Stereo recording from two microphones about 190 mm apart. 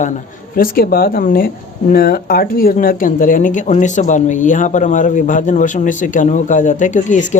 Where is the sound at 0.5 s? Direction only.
50° left (ahead or behind).